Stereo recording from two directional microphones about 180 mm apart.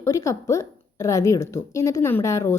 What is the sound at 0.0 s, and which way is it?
A woman's voice, 15° left (ahead or behind).